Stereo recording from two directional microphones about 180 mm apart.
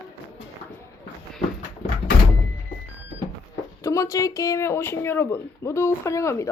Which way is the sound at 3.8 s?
15° left (ahead or behind).